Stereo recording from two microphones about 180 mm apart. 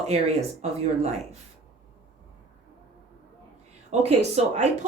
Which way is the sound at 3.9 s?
40° right (ahead or behind).